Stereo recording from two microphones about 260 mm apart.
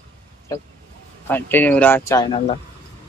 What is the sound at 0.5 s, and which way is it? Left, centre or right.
Speech, centre.